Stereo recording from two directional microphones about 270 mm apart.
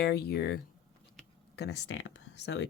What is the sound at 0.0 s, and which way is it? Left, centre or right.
Speech, left.